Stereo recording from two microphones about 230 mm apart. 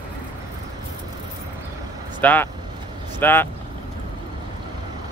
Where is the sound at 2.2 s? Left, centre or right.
Centre.